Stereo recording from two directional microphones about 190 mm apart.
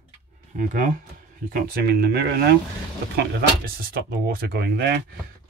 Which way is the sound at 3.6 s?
50° right (ahead or behind).